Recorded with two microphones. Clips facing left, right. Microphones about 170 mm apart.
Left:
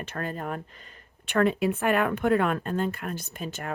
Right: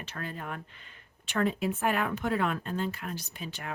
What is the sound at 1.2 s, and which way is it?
Speech, 60° left (ahead or behind).